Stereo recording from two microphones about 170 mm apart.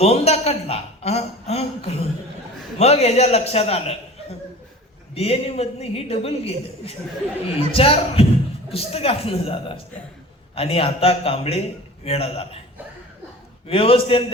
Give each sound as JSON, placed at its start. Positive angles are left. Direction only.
{"t": 0.0, "sound": "a sound", "side_deg": 40}
{"t": 2.7, "sound": "a woman's voice", "side_deg": 40}
{"t": 5.1, "sound": "a woman's voice", "side_deg": 35}
{"t": 13.7, "sound": "a woman's voice", "side_deg": 35}